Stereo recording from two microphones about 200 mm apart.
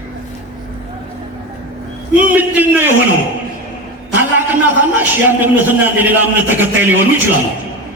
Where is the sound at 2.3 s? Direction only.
10° right (ahead or behind).